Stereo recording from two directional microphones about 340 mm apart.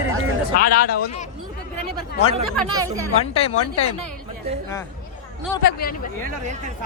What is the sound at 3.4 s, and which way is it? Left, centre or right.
Speech, centre.